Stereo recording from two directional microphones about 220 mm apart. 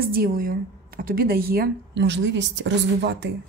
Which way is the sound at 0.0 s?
40° right (ahead or behind).